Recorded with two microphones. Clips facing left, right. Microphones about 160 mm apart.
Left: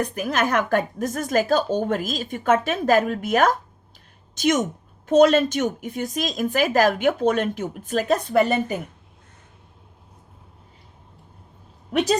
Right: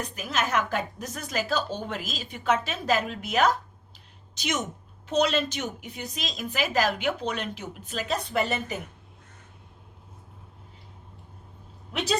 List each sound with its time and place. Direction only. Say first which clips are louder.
0.0 s a woman's voice: left 7 dB; 55° left (ahead or behind)